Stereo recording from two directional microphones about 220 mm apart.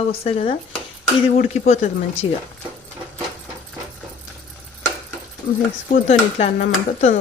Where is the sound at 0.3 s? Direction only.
30° left (ahead or behind).